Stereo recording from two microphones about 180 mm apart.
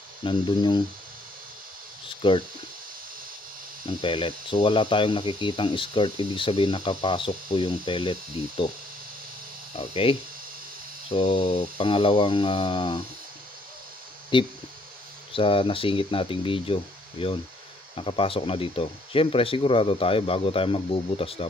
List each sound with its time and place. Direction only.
0.2 s speech: 25° left (ahead or behind)
4.0 s speech: 30° left (ahead or behind)
9.8 s speech: 30° left (ahead or behind)
14.3 s speech: 30° left (ahead or behind)